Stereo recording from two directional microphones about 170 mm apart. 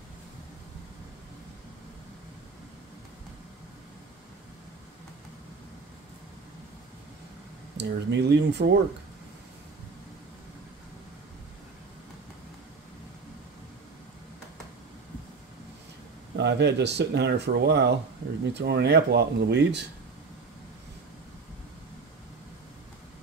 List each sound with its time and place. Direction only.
7.7 s speech: 90° right
16.3 s speech: 90° right
18.4 s speech: 85° right